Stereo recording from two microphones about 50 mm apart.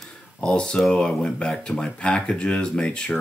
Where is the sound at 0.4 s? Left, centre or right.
Centre.